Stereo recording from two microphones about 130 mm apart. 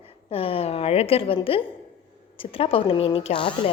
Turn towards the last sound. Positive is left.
turn(degrees=40)  # may be behind; listen again after turning